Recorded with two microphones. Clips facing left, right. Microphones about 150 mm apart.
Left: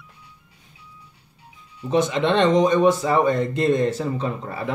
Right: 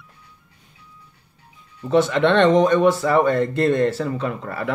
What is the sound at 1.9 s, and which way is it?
Speech, 15° left (ahead or behind).